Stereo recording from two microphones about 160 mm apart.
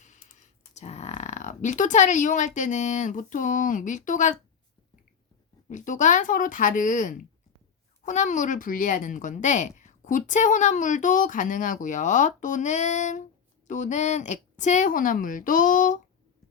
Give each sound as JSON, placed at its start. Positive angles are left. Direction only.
{"t": 0.0, "sound": "speech", "side_deg": 50}
{"t": 5.6, "sound": "speech", "side_deg": 50}